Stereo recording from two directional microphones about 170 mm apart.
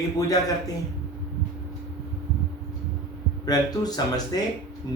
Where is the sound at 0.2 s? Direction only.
20° left (ahead or behind).